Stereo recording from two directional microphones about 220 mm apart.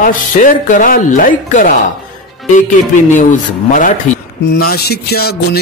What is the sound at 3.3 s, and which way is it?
Speech, 35° left (ahead or behind).